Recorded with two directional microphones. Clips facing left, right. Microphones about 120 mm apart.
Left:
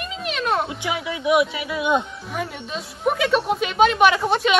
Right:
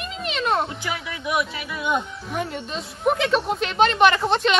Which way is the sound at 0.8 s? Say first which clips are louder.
Left 5 dB; 20° left (ahead or behind).